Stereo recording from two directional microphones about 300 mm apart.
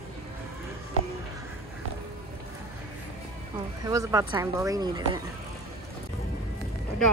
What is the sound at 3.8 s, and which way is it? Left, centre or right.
A woman's voice, centre.